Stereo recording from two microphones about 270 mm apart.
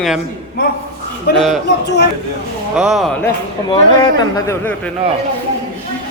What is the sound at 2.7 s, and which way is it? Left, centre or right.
Speech, centre.